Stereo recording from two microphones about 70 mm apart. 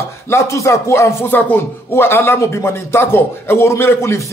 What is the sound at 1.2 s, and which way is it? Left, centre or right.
Speech, left.